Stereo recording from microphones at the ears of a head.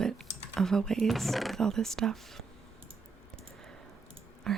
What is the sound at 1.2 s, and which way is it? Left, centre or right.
Speech, centre.